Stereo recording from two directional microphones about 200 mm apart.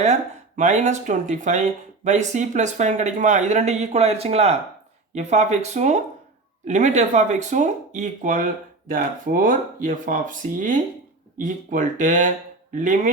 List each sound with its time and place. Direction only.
0.0 s speech: 35° right (ahead or behind)